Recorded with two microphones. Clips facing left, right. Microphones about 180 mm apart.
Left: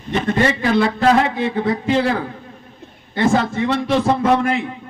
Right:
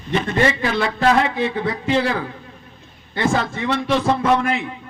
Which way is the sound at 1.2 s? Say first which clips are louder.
Left 2 dB; 50° left (ahead or behind).